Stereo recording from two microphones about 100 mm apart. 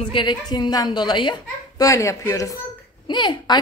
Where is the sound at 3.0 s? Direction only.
50° left (ahead or behind).